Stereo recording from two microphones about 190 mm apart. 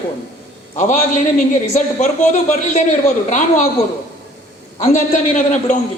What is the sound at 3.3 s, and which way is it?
Speech, 40° left (ahead or behind).